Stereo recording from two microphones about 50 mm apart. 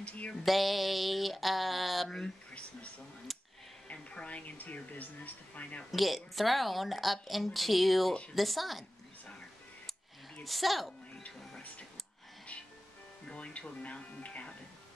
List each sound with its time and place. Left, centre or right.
0.0 s speech: left
0.5 s speech: centre
3.3 s a sound: centre
3.9 s speech: left
5.9 s speech: centre
10.4 s music: centre
13.3 s music: left
13.8 s speech: left